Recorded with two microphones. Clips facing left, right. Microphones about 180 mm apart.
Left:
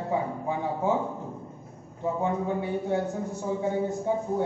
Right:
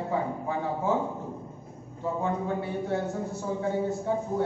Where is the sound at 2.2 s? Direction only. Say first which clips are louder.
Left 1 dB; 15° left (ahead or behind).